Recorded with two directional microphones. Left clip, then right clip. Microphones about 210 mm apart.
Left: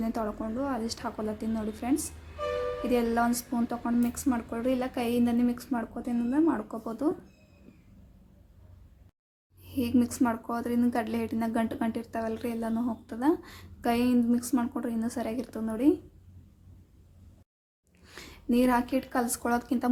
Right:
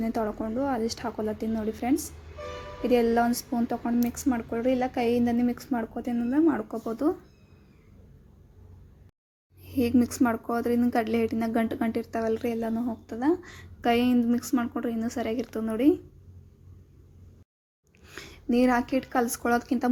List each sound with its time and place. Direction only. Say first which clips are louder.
0.0 s a woman's voice: right 3 dB; 15° right (ahead or behind)
9.6 s a woman's voice: right 3 dB; 15° right (ahead or behind)
18.0 s speech: right 2 dB; 10° right (ahead or behind)